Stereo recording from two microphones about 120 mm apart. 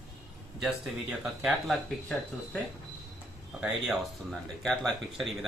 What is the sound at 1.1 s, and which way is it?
Speech, 5° right (ahead or behind).